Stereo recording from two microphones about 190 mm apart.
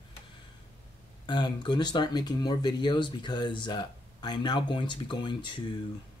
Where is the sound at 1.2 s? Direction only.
25° left (ahead or behind).